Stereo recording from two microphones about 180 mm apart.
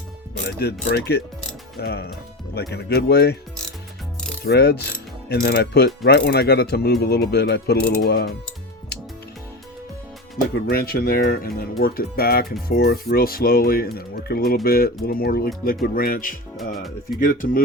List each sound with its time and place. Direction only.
0.4 s speech: 65° left (ahead or behind)
4.4 s speech: 65° left (ahead or behind)
10.7 s speech: 55° left (ahead or behind)
16.7 s speech: centre (ahead or behind)
17.2 s speech: 50° left (ahead or behind)